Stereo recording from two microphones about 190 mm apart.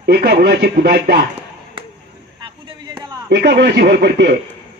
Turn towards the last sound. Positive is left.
turn(degrees=-60)  # may be behind; listen again after turning